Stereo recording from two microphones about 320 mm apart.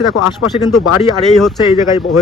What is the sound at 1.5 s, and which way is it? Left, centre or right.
Speech, centre.